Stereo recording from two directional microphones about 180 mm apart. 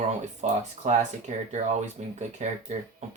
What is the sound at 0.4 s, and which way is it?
Speech, 40° right (ahead or behind).